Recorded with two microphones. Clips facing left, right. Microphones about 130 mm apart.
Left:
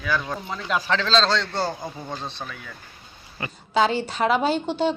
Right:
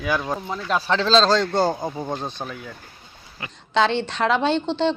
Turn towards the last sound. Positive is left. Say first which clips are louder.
# right 2 dB
turn(degrees=10)  # may be behind; listen again after turning